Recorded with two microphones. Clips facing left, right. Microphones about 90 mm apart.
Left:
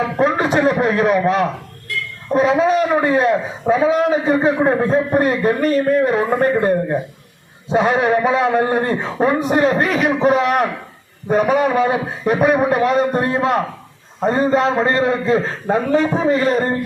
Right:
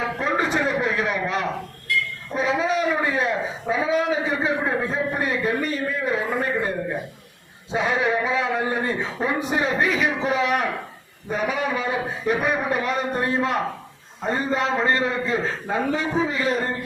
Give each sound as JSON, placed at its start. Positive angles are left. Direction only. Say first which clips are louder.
{"t": 0.2, "sound": "a man's voice", "louder": "left 8 dB", "side_deg": 60}
{"t": 7.7, "sound": "a man's voice", "louder": "left 7 dB", "side_deg": 55}